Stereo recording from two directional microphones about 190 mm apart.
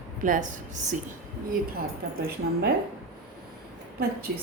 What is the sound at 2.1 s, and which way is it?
Speech, 55° right (ahead or behind).